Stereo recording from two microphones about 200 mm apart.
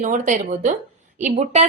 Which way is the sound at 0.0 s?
40° right (ahead or behind).